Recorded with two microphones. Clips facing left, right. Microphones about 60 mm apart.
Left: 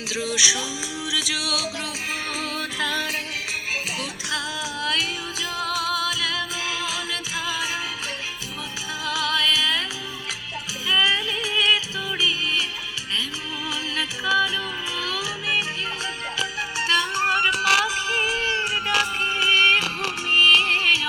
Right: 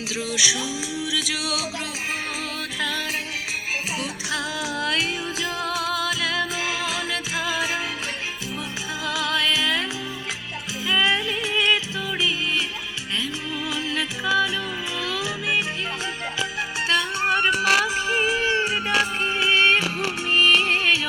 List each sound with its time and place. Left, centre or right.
0.1 s music: centre
4.6 s music: right
9.0 s music: right
10.8 s music: right
13.9 s music: centre
15.2 s music: centre
17.2 s music: right
20.3 s music: right